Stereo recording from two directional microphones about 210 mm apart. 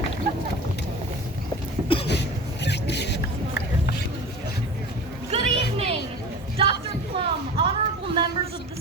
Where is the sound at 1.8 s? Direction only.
25° left (ahead or behind).